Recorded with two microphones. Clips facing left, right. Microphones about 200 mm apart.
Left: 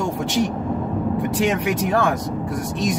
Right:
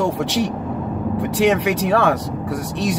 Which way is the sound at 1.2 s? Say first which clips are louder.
Right 6 dB; 75° right (ahead or behind).